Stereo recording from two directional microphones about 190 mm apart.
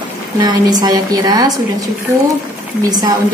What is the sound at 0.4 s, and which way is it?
A woman's voice, 20° right (ahead or behind).